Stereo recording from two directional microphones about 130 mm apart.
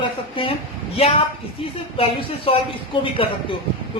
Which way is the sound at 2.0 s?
45° left (ahead or behind).